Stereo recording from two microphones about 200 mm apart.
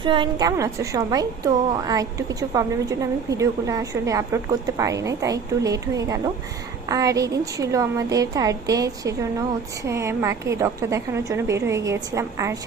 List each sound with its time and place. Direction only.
0.0 s a woman's voice: 25° right (ahead or behind)